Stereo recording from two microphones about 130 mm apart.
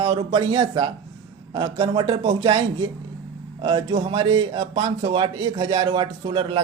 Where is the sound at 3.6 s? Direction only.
40° right (ahead or behind).